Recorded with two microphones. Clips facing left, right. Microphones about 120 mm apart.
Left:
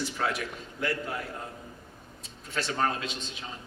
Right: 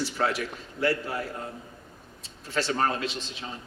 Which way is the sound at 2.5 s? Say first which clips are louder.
Right 3 dB; 30° right (ahead or behind).